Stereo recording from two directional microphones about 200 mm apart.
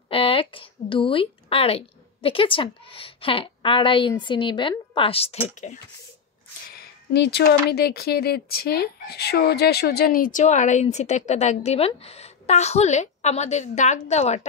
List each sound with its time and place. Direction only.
0.1 s speech: 25° left (ahead or behind)
6.7 s speech: 50° left (ahead or behind); by 14.4 s 35° left (ahead or behind)